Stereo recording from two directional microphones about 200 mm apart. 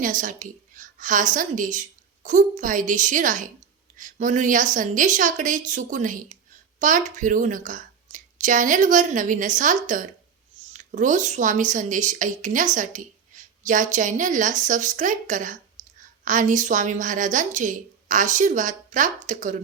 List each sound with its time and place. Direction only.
0.0 s a woman's voice: 40° right (ahead or behind)